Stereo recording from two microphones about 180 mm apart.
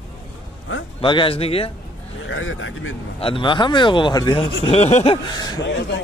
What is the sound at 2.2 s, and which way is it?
Speech, 90° left.